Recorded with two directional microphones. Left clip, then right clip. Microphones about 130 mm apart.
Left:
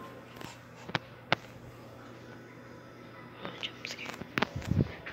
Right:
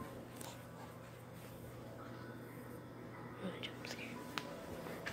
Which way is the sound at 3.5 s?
25° right (ahead or behind).